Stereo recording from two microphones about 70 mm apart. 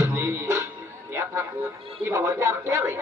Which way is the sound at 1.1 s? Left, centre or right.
Right.